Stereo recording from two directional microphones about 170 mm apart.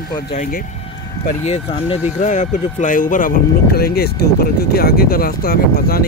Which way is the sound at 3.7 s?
65° left (ahead or behind).